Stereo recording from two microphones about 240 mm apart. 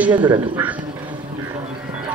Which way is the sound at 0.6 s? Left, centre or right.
Centre.